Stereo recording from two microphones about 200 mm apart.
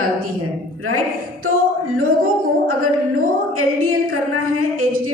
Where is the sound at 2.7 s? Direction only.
90° right.